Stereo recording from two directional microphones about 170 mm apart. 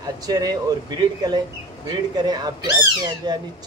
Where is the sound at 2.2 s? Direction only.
25° right (ahead or behind).